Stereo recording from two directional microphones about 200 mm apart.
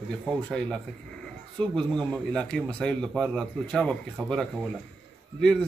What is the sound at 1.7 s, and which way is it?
Speech, 5° left (ahead or behind).